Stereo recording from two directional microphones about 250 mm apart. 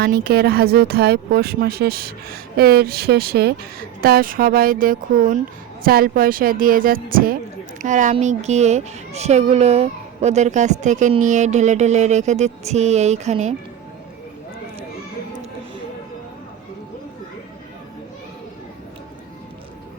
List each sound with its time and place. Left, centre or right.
0.0 s a woman's voice: right